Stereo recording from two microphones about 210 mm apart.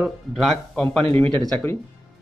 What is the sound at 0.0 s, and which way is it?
Speech, centre (ahead or behind).